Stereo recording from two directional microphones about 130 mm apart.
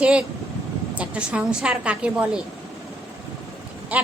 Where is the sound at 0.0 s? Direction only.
10° right (ahead or behind).